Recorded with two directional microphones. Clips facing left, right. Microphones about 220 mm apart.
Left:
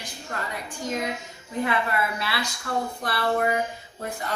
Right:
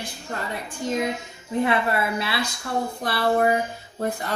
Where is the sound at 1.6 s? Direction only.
30° right (ahead or behind).